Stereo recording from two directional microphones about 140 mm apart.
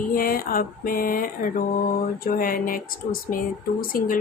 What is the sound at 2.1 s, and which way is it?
A woman's voice, 90° left.